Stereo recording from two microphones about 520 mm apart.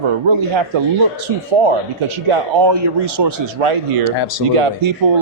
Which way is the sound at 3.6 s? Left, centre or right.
Right.